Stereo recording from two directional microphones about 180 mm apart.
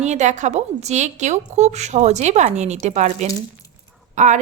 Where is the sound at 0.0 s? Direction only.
40° right (ahead or behind).